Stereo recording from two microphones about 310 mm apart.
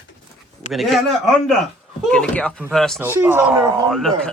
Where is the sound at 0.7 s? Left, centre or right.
Centre.